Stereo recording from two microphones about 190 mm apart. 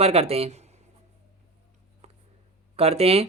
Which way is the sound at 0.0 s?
35° right (ahead or behind).